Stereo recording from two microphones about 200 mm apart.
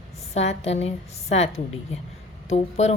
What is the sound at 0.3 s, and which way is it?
Speech, 30° left (ahead or behind).